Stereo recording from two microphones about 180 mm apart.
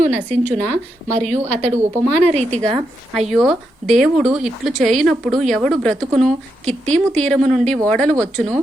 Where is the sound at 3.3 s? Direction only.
Centre (ahead or behind).